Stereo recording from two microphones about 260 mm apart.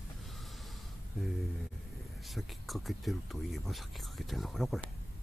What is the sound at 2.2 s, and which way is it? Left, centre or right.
Speech, centre.